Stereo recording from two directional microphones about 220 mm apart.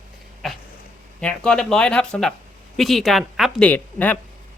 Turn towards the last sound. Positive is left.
turn(degrees=10)  # may be behind; listen again after turning